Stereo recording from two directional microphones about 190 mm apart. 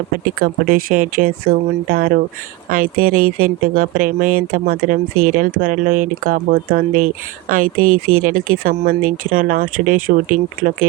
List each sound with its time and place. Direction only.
0.4 s speech: 50° right (ahead or behind)